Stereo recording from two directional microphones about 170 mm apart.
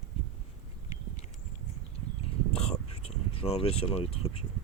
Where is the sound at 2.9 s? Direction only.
35° left (ahead or behind).